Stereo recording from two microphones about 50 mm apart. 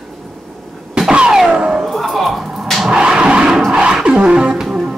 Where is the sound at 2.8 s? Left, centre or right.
Centre.